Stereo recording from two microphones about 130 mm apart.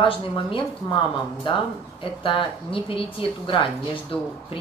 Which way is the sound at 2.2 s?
40° left (ahead or behind).